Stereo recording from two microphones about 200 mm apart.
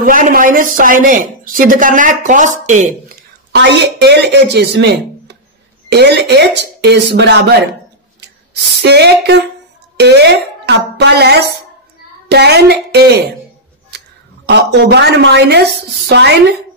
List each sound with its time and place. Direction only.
0.0 s a woman's voice: 45° right (ahead or behind)
3.5 s speech: 60° right (ahead or behind)
8.8 s speech: 55° right (ahead or behind)